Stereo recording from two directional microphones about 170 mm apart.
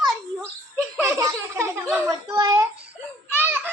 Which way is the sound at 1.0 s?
15° right (ahead or behind).